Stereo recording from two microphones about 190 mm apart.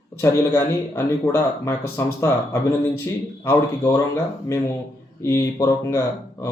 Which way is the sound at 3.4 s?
15° left (ahead or behind).